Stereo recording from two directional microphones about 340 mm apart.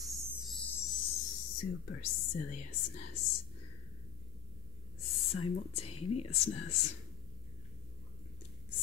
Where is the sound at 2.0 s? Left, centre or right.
Left.